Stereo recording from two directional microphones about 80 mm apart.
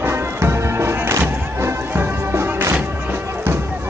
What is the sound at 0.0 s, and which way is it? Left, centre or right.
Music, right.